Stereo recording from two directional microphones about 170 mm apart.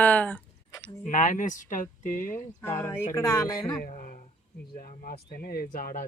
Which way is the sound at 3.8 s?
50° left (ahead or behind).